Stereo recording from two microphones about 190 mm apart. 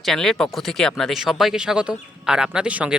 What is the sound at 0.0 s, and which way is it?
Speech, centre (ahead or behind).